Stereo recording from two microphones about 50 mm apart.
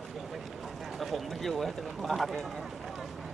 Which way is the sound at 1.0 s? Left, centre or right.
Centre.